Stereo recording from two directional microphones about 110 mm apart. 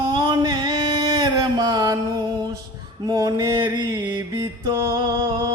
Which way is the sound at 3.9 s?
15° right (ahead or behind).